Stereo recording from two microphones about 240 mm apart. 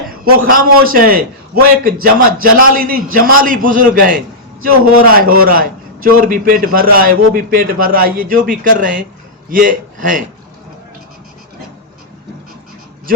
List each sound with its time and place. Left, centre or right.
0.1 s a man's voice: right